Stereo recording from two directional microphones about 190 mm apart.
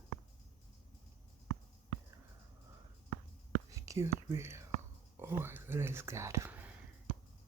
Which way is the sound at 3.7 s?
15° right (ahead or behind).